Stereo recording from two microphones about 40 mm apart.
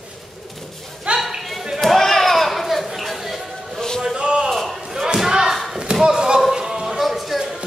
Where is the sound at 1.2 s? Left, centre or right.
Centre.